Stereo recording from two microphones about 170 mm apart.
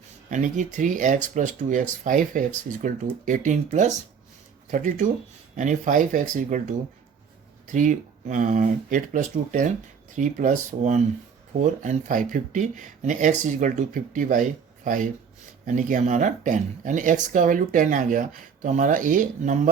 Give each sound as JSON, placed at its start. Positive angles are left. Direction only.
{"t": 0.3, "sound": "speech", "side_deg": -50}
{"t": 7.7, "sound": "speech", "side_deg": -50}
{"t": 15.6, "sound": "speech", "side_deg": -50}